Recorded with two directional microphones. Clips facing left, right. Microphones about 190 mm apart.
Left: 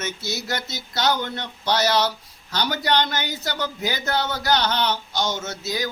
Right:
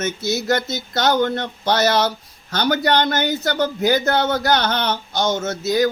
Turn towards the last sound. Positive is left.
turn(degrees=-50)  # may be behind; listen again after turning